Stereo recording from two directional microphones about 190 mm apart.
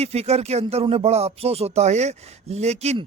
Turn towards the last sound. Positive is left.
turn(degrees=-35)  # may be behind; listen again after turning